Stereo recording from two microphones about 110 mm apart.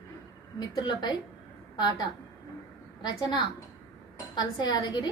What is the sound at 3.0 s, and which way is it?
A woman's voice, 45° left (ahead or behind).